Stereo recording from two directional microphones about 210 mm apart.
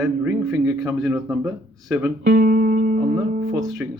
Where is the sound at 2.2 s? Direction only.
45° right (ahead or behind).